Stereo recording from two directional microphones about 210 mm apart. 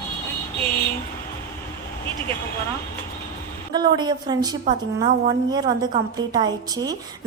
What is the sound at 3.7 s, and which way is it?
A woman's voice, 20° right (ahead or behind).